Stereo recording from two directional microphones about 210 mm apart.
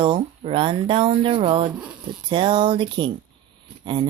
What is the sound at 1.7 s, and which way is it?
Speech, 5° right (ahead or behind).